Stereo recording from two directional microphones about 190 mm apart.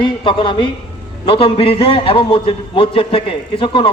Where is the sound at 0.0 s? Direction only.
25° left (ahead or behind).